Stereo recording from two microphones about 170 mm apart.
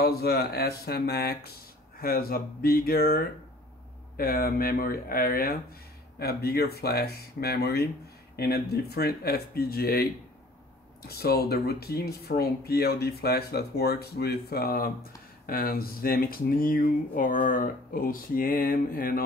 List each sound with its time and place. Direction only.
0.0 s speech: 65° left (ahead or behind)
11.1 s speech: 65° left (ahead or behind)